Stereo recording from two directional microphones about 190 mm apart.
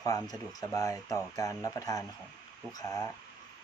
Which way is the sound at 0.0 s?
20° left (ahead or behind).